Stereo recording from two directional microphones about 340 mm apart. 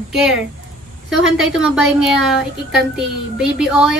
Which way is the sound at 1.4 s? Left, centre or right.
Centre.